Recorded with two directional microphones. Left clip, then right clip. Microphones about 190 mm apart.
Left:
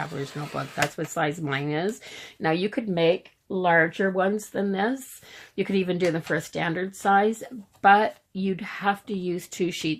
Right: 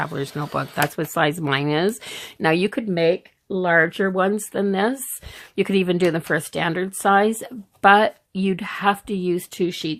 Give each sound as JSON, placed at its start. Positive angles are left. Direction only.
{"t": 0.0, "sound": "speech", "side_deg": -45}